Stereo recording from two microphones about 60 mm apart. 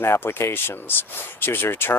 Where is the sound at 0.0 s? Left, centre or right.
Left.